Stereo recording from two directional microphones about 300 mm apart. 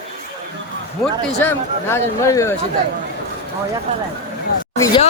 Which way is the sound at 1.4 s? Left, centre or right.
Centre.